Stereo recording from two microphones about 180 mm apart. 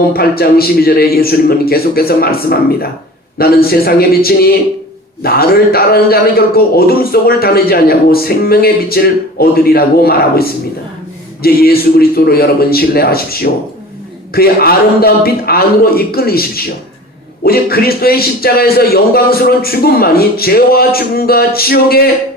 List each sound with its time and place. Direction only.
0.1 s a man's voice: 55° left (ahead or behind)